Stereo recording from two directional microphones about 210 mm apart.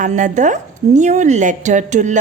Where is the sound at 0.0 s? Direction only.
35° right (ahead or behind).